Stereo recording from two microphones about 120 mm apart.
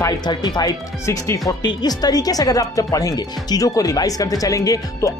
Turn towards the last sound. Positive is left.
turn(degrees=30)  # may be behind; listen again after turning